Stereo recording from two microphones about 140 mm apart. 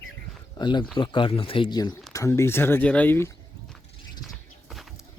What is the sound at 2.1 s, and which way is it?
Speech, 20° left (ahead or behind).